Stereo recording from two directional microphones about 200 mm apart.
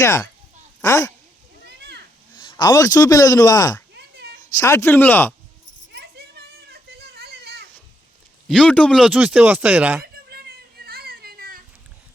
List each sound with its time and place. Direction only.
0.0 s speech: 15° left (ahead or behind)
1.6 s children playing: 55° right (ahead or behind)
2.4 s speech: 20° left (ahead or behind)
3.9 s a sound: 55° right (ahead or behind)
4.5 s speech: 15° left (ahead or behind)
5.9 s children playing: 55° right (ahead or behind)
8.4 s speech: 5° left (ahead or behind)
10.2 s children playing: 50° right (ahead or behind)